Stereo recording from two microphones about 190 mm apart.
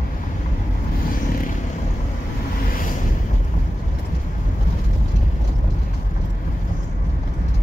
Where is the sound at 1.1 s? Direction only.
45° left (ahead or behind).